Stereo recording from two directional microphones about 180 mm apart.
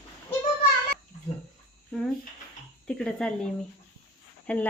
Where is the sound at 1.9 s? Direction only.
5° left (ahead or behind).